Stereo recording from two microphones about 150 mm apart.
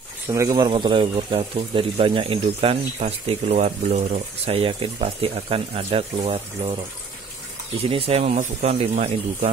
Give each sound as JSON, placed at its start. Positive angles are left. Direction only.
{"t": 0.3, "sound": "speech", "side_deg": -20}
{"t": 7.8, "sound": "speech", "side_deg": -40}